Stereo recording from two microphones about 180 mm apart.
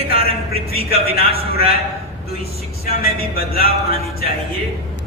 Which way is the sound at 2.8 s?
55° left (ahead or behind).